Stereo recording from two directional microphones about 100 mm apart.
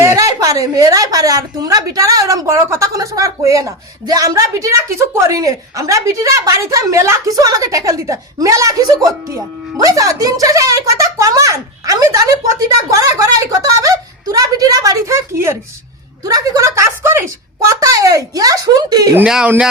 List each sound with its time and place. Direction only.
0.2 s a woman's voice: 35° right (ahead or behind)
17.7 s a woman's voice: 35° right (ahead or behind)
19.2 s speech: 10° right (ahead or behind)